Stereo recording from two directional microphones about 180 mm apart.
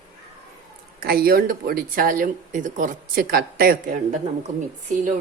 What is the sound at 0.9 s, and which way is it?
Speech, 55° right (ahead or behind).